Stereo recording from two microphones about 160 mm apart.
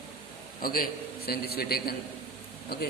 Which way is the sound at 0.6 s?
65° left (ahead or behind).